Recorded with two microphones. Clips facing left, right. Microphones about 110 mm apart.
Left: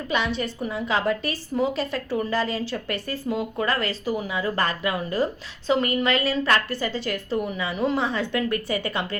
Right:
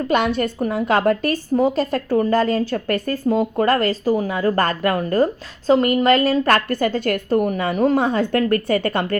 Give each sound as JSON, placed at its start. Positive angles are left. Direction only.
{"t": 0.1, "sound": "a woman's voice", "side_deg": -50}